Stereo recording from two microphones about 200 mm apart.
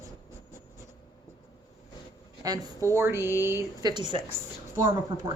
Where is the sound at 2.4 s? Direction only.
15° right (ahead or behind).